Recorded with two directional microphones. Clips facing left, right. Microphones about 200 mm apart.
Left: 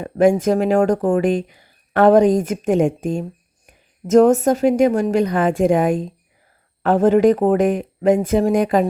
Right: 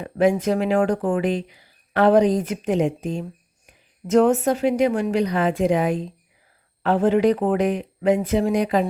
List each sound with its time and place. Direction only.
0.0 s speech: 45° left (ahead or behind)